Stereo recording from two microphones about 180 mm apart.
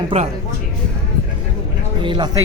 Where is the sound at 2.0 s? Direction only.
25° right (ahead or behind).